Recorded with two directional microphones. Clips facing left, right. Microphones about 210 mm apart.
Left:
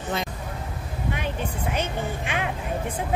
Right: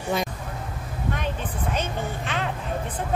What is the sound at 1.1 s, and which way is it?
Speech, 10° left (ahead or behind).